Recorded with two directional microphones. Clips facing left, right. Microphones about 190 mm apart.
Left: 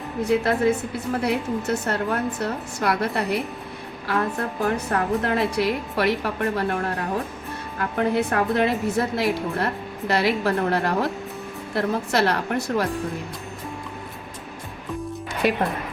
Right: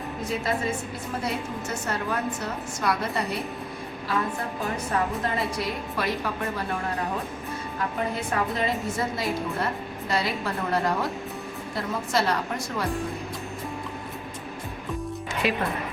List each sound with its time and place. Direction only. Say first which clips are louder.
0.3 s a woman's voice: left 8 dB; 65° left (ahead or behind)
4.6 s a woman's voice: left 4 dB; 65° left (ahead or behind)
7.9 s a woman's voice: left 8 dB; 65° left (ahead or behind)